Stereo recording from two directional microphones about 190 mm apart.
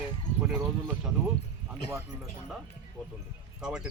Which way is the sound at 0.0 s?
5° right (ahead or behind).